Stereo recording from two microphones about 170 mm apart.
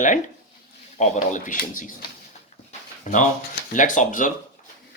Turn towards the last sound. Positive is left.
turn(degrees=50)  # may be behind; listen again after turning